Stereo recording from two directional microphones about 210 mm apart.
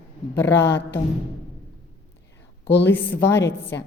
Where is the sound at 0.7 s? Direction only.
55° left (ahead or behind).